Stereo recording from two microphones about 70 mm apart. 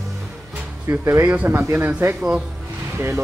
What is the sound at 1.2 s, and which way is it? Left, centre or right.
Speech, right.